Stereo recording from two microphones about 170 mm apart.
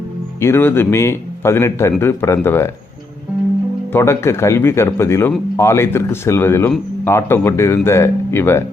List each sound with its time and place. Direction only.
0.3 s speech: 15° left (ahead or behind)
3.9 s speech: 15° left (ahead or behind)